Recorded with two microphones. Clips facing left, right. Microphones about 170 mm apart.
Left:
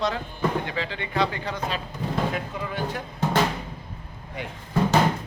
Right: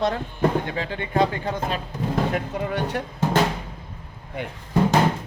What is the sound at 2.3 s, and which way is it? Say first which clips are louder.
Speech: right 5 dB; 65° right (ahead or behind).